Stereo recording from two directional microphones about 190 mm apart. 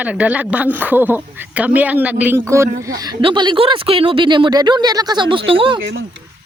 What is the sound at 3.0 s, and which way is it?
Speech, 25° right (ahead or behind).